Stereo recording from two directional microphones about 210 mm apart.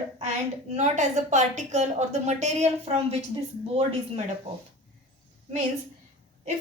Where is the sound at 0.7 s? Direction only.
35° right (ahead or behind).